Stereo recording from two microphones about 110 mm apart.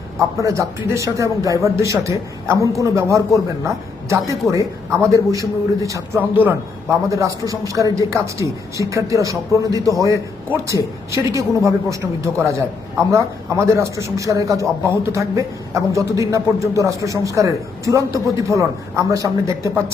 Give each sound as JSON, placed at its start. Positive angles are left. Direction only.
{"t": 0.2, "sound": "speech", "side_deg": -30}
{"t": 6.1, "sound": "a man's voice", "side_deg": -15}
{"t": 7.1, "sound": "speech", "side_deg": -30}